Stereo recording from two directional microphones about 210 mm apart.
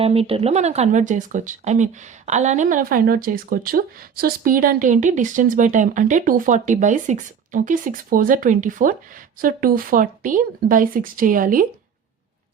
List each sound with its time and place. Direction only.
0.0 s speech: 30° right (ahead or behind)